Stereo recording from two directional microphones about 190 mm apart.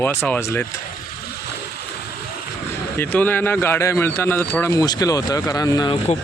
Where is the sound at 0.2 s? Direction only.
10° left (ahead or behind).